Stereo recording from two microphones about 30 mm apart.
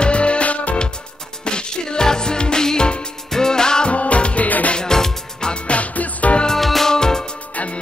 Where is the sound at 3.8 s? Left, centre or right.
Left.